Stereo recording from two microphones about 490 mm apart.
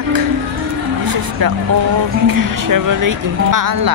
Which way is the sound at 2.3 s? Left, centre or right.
Right.